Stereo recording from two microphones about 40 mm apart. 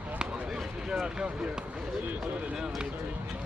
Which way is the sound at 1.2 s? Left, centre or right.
Right.